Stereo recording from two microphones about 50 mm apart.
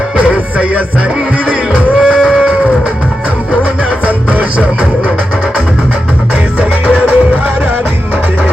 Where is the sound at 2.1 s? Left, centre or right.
Centre.